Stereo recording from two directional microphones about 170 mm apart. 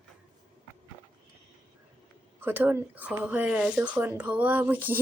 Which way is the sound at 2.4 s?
10° right (ahead or behind).